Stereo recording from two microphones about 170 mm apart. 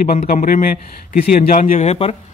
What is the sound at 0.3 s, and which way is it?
A man's voice, 55° left (ahead or behind).